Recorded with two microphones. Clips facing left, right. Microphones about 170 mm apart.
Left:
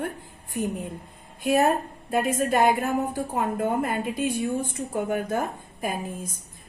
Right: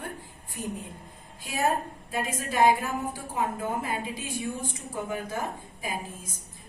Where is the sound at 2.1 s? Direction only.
55° left (ahead or behind).